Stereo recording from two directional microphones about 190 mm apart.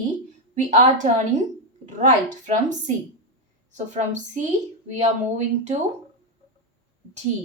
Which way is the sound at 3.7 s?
40° right (ahead or behind).